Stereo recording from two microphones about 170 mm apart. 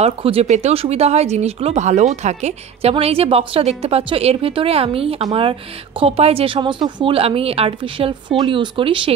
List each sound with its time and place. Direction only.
0.0 s speech: 35° right (ahead or behind)